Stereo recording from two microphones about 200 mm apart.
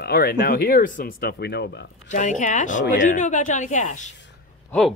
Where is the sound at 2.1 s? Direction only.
40° left (ahead or behind).